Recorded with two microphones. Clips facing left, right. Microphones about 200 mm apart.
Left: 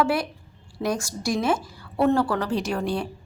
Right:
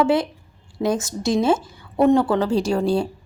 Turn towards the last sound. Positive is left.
turn(degrees=-30)  # may be behind; listen again after turning